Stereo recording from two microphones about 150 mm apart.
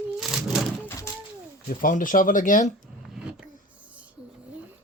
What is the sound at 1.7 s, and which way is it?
Speech, 65° left (ahead or behind).